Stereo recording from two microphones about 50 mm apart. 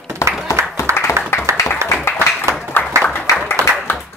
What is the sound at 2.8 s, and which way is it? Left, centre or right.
Applause, left.